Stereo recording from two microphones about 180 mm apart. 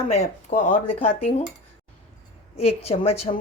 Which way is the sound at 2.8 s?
35° left (ahead or behind).